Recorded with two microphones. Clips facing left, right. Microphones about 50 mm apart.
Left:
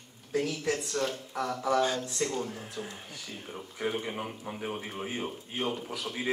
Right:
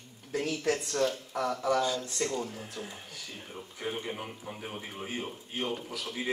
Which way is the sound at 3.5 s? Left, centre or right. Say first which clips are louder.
Left 4 dB; centre.